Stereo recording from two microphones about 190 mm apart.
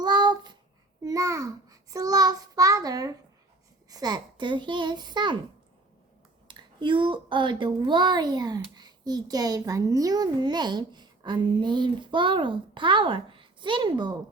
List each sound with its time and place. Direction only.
0.0 s child singing: 25° right (ahead or behind)
1.0 s a child's voice: 15° right (ahead or behind)
6.5 s a woman's voice: 25° right (ahead or behind)